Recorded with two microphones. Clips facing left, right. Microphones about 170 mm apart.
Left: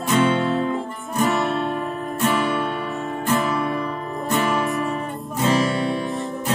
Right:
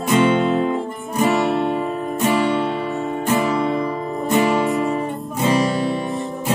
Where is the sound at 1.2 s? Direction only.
15° right (ahead or behind).